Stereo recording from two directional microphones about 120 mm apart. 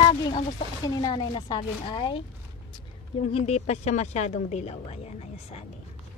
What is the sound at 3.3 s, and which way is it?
Speech, 60° left (ahead or behind).